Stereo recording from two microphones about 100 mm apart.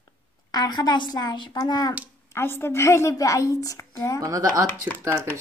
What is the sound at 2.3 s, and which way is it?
A woman's voice, 25° left (ahead or behind).